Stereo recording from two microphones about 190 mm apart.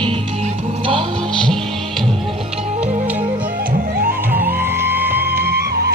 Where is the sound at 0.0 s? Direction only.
25° right (ahead or behind).